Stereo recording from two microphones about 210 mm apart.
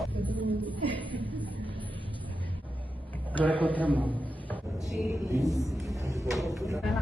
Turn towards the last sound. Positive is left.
turn(degrees=0)  # may be behind; listen again after turning